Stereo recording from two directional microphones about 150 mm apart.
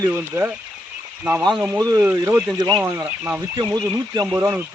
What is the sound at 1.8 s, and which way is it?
Speech, 25° right (ahead or behind).